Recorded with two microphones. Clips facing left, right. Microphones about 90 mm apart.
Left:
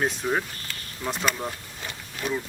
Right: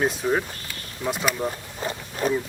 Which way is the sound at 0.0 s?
Centre (ahead or behind).